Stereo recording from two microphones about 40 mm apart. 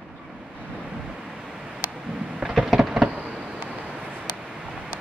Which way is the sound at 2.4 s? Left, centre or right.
Centre.